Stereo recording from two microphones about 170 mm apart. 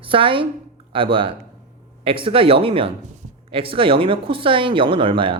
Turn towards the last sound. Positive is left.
turn(degrees=-30)  # may be behind; listen again after turning